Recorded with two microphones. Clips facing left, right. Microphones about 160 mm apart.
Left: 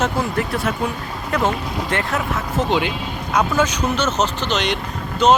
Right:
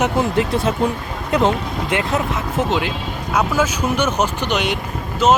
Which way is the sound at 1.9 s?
15° right (ahead or behind).